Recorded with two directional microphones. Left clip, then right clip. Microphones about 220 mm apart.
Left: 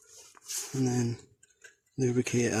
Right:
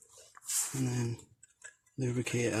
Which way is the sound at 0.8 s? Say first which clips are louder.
Left 6 dB; 50° left (ahead or behind).